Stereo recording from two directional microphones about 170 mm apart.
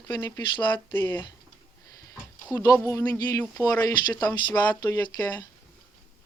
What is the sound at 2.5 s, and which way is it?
Speech, 20° left (ahead or behind).